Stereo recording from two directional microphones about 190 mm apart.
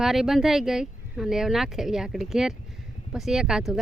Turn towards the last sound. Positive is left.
turn(degrees=0)  # may be behind; listen again after turning